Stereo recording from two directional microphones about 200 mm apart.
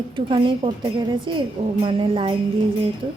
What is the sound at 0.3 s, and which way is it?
Speech, 25° right (ahead or behind).